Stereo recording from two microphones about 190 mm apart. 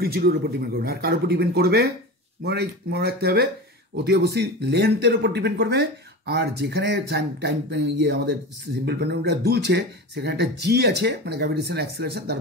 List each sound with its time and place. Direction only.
0.0 s speech: 55° right (ahead or behind)